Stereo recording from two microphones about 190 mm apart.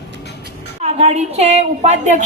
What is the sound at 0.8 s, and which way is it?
A woman's voice, 35° right (ahead or behind).